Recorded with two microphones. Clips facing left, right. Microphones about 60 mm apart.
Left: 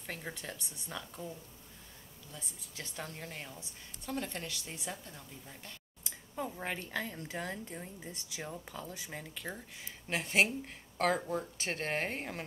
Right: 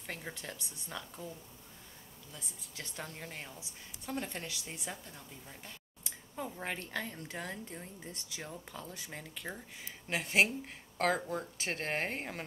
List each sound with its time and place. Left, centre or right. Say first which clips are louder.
0.0 s speech: left 1 dB; centre
2.3 s speech: left 1 dB; centre
6.3 s speech: left 1 dB; centre